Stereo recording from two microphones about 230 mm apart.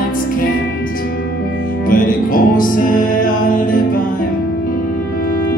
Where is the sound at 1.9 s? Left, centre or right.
Left.